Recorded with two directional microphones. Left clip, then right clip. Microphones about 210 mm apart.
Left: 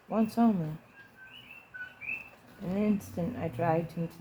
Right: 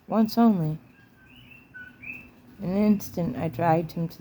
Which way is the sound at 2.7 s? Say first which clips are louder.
Right 6 dB; 45° right (ahead or behind).